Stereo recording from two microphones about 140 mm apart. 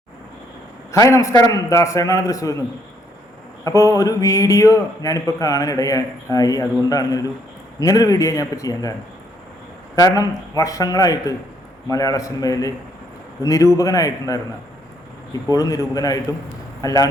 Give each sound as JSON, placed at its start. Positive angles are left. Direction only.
{"t": 0.9, "sound": "a man's voice", "side_deg": 20}
{"t": 3.9, "sound": "a man's voice", "side_deg": 25}
{"t": 9.9, "sound": "a man's voice", "side_deg": 25}
{"t": 15.5, "sound": "a man's voice", "side_deg": 25}